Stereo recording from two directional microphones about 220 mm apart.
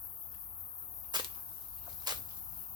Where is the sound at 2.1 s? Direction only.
20° right (ahead or behind).